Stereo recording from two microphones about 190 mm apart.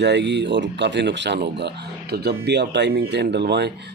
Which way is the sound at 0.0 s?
65° right (ahead or behind).